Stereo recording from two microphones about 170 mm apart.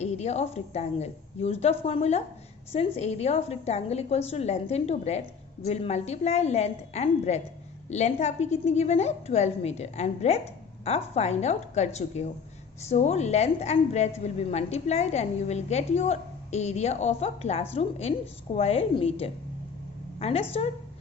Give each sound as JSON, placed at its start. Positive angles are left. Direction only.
{"t": 0.0, "sound": "a woman's voice", "side_deg": 40}